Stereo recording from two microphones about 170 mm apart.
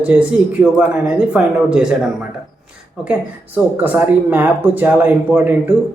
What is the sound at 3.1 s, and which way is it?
Speech, 10° right (ahead or behind).